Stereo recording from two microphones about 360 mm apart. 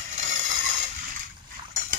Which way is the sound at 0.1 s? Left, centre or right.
Right.